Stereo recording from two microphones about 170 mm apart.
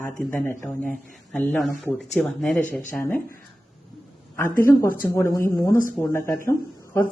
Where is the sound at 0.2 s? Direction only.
Centre (ahead or behind).